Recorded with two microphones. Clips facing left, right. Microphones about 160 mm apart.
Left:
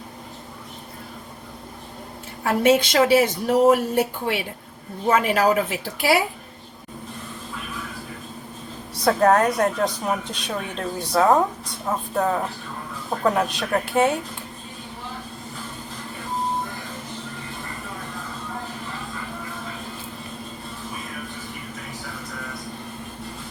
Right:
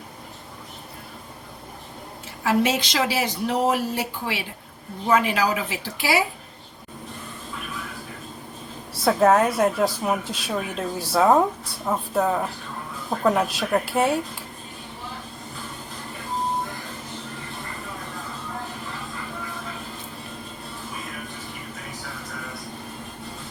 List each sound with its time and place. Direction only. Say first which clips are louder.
2.4 s a woman's voice: left 4 dB; 55° left (ahead or behind)
9.0 s a woman's voice: even; 5° right (ahead or behind)